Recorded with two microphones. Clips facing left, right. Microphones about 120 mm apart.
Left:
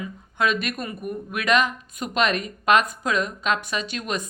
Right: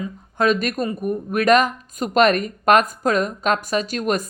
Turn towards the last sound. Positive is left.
turn(degrees=-45)  # may be behind; listen again after turning